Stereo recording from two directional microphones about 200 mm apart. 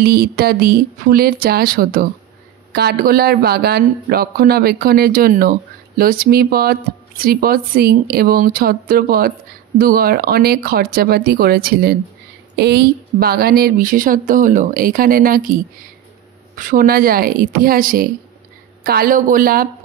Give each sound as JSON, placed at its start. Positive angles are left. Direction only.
{"t": 0.0, "sound": "speech", "side_deg": -50}